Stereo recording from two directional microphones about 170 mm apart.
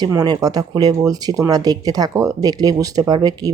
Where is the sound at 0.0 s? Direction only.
20° right (ahead or behind).